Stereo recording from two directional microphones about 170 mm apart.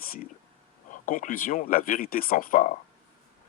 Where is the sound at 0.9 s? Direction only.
50° left (ahead or behind).